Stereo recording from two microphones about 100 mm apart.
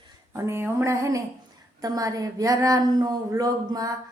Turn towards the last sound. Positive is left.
turn(degrees=-40)  # may be behind; listen again after turning